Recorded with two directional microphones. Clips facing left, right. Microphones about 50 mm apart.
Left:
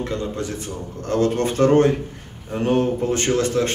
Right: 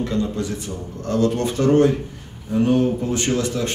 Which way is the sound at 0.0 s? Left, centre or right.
Left.